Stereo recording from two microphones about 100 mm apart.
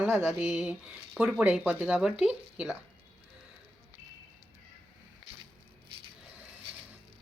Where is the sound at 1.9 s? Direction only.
5° right (ahead or behind).